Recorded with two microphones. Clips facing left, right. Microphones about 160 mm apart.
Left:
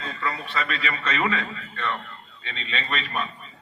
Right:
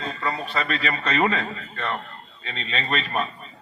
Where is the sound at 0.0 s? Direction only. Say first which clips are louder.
Right 2 dB; 35° right (ahead or behind).